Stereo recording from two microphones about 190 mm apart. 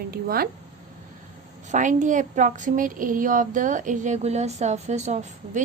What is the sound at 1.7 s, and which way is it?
Speech, 40° right (ahead or behind).